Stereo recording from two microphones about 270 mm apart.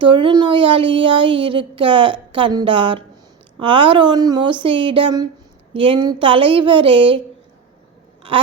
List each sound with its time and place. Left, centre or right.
0.0 s speech: centre